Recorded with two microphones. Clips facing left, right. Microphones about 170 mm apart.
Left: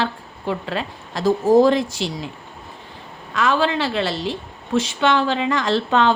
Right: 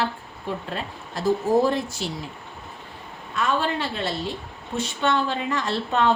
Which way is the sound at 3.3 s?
90° left.